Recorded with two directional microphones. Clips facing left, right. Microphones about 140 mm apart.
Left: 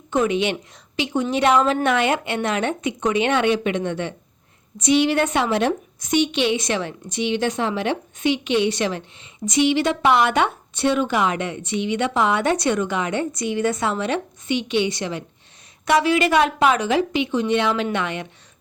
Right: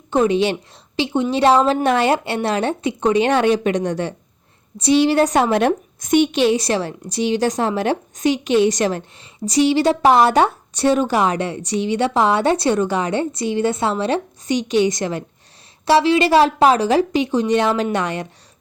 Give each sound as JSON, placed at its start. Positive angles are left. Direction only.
{"t": 0.1, "sound": "a woman's voice", "side_deg": -30}
{"t": 15.9, "sound": "a woman's voice", "side_deg": -30}